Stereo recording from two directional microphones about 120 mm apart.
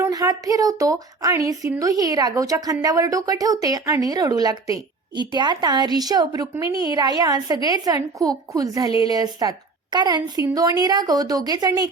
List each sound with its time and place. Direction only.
0.0 s speech: 30° right (ahead or behind)